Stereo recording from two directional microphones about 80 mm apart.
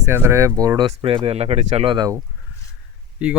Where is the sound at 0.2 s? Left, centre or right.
Right.